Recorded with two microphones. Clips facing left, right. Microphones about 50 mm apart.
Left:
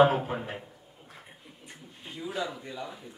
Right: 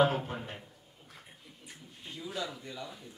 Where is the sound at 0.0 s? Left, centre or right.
Centre.